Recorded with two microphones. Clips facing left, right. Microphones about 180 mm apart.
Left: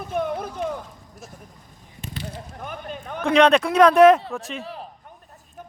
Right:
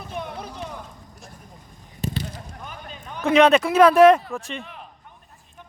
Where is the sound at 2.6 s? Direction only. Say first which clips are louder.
Left 5 dB; 55° left (ahead or behind).